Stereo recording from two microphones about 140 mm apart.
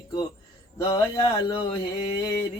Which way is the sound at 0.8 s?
30° left (ahead or behind).